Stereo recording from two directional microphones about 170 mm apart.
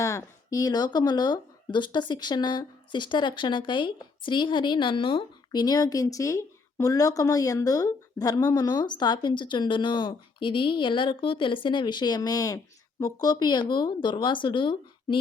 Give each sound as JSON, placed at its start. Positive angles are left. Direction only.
{"t": 0.0, "sound": "speech", "side_deg": 20}